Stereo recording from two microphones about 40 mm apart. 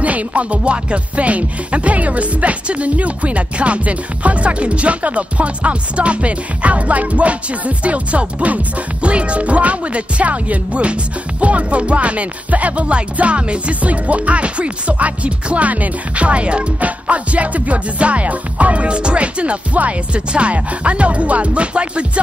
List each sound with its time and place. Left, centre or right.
0.0 s speech: right